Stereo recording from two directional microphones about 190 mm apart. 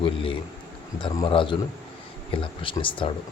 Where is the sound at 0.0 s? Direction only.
30° left (ahead or behind).